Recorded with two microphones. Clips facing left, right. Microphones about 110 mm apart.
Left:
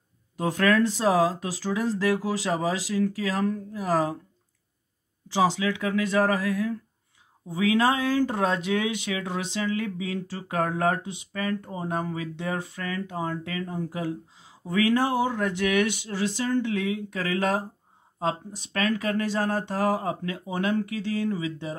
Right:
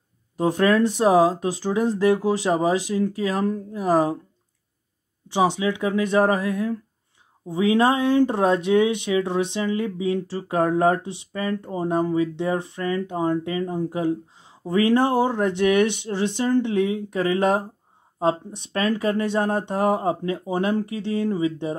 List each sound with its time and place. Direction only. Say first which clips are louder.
0.4 s speech: right 4 dB; 25° right (ahead or behind)
5.3 s speech: right 3 dB; 20° right (ahead or behind)
18.7 s speech: right 4 dB; 30° right (ahead or behind)